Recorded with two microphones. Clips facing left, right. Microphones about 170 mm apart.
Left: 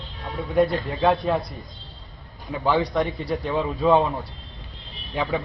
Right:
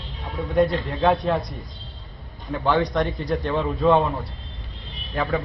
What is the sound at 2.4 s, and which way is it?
Speech, centre (ahead or behind).